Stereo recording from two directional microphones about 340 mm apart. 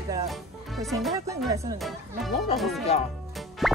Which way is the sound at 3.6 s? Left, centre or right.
Centre.